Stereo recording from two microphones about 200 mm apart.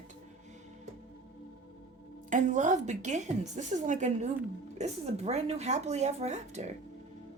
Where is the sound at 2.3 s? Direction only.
35° right (ahead or behind).